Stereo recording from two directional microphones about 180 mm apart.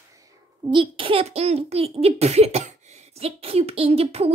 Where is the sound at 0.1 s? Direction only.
20° right (ahead or behind).